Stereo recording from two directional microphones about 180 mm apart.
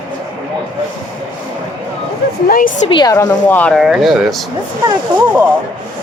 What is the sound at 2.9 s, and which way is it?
Speech, 25° left (ahead or behind).